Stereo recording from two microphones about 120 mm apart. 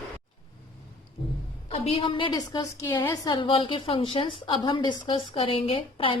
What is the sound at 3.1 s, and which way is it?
A woman's voice, 40° left (ahead or behind).